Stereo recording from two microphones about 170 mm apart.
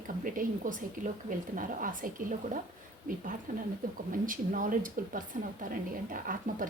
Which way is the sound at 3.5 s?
50° right (ahead or behind).